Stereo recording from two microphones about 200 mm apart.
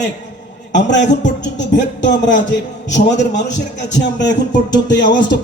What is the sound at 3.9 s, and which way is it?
Speech, 60° left (ahead or behind).